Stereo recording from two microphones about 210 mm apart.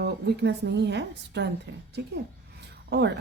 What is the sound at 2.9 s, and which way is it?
Speech, 55° right (ahead or behind).